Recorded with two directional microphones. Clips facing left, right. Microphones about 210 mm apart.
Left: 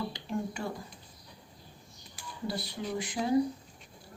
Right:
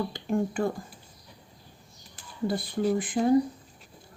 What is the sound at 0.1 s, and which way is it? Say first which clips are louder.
Speech: right 7 dB; 50° right (ahead or behind).